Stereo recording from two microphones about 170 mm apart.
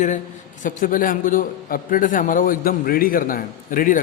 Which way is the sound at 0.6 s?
50° left (ahead or behind).